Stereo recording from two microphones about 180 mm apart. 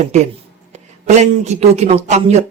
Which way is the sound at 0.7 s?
40° right (ahead or behind).